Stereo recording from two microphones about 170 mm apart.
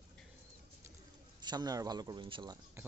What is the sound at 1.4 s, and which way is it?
A man's voice, 25° right (ahead or behind).